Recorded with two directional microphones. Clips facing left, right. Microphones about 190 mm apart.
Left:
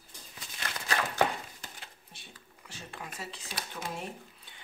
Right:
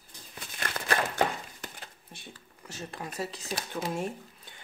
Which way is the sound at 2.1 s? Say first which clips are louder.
Right 7 dB; 50° right (ahead or behind).